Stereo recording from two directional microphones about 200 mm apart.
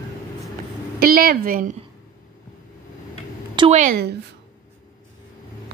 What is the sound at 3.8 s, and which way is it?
Speech, 45° right (ahead or behind).